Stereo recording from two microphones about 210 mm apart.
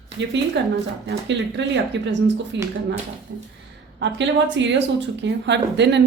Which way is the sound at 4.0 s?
60° right (ahead or behind).